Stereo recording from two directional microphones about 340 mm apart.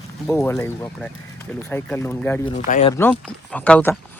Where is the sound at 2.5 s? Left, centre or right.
Left.